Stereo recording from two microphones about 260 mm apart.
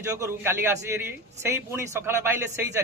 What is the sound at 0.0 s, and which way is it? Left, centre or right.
A man's voice, centre.